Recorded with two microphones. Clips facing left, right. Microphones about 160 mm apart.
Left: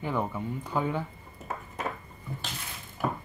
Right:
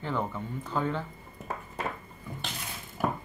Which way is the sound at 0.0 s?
10° left (ahead or behind).